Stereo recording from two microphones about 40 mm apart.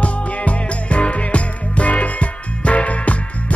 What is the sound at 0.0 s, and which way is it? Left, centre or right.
Music, left.